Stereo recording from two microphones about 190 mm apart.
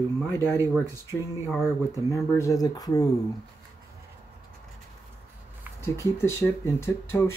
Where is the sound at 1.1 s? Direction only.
10° left (ahead or behind).